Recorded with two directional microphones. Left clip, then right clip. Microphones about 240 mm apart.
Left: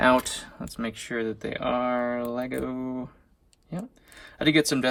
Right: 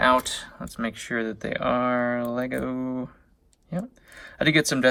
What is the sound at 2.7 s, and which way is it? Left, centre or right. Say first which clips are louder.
Speech: right 3 dB; left.